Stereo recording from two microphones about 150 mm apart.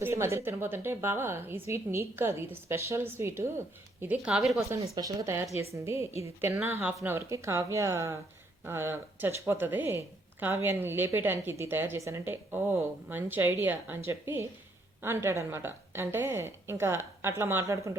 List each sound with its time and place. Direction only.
0.0 s a woman's voice: 20° right (ahead or behind)
4.9 s a woman's voice: 25° right (ahead or behind)